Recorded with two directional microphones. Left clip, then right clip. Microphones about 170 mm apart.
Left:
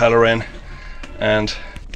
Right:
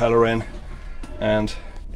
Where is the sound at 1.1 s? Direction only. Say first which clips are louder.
Left 4 dB; 20° left (ahead or behind).